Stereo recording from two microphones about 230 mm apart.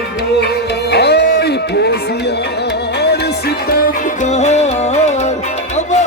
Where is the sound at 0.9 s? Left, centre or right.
Left.